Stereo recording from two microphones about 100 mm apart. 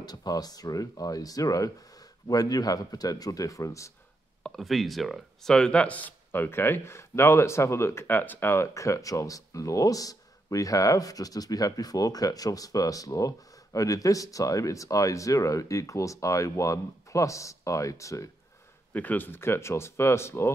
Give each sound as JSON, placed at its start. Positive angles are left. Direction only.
{"t": 0.0, "sound": "speech", "side_deg": 40}
{"t": 4.4, "sound": "speech", "side_deg": 0}
{"t": 18.9, "sound": "speech", "side_deg": 15}